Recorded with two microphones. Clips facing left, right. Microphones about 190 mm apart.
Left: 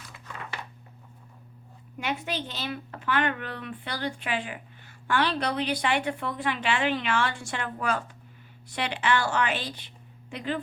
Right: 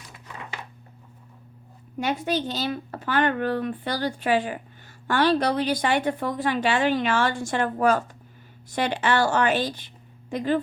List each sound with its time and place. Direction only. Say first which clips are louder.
2.0 s a woman's voice: right 6 dB; 35° right (ahead or behind)